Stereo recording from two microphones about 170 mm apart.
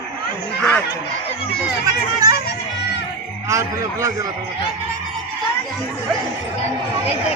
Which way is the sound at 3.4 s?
20° right (ahead or behind).